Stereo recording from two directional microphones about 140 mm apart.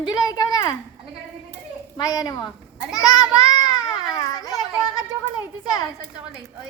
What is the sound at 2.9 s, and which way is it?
Children playing, 30° left (ahead or behind).